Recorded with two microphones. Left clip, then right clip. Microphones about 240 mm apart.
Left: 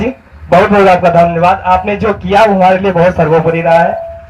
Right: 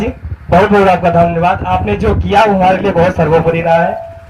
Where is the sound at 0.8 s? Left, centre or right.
Left.